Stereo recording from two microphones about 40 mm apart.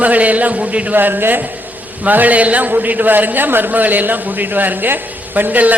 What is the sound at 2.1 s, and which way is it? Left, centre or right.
A woman's voice, right.